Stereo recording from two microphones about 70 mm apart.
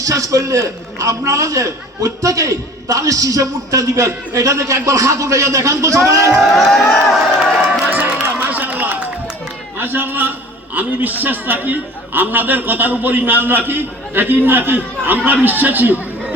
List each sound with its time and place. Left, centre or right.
0.0 s a man's voice: right
6.4 s speech: centre
7.9 s a sound: right
9.7 s a man's voice: right